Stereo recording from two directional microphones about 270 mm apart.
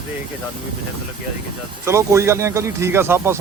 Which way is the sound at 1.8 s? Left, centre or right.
Centre.